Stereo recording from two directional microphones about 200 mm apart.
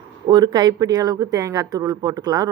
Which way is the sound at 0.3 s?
20° right (ahead or behind).